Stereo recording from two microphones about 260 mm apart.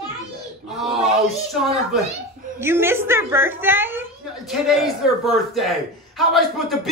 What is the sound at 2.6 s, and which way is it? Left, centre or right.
A man's voice, centre.